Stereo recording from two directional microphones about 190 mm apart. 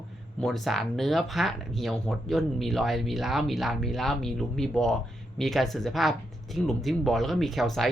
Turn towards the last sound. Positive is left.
turn(degrees=0)  # may be behind; listen again after turning